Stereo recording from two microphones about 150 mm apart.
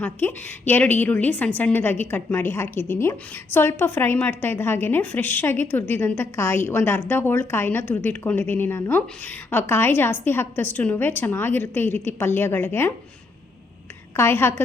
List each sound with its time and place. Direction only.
0.0 s a woman's voice: 10° left (ahead or behind)
14.2 s a woman's voice: 15° left (ahead or behind)